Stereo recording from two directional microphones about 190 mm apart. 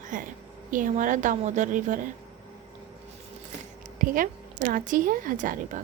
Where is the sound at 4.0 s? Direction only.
45° right (ahead or behind).